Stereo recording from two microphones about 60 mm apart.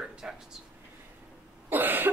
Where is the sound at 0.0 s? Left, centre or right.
Centre.